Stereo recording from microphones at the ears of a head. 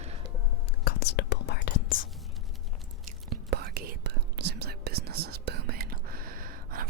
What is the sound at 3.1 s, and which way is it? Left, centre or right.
Whispering, right.